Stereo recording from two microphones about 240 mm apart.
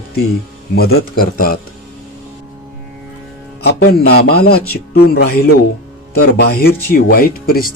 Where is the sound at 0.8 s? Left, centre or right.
Left.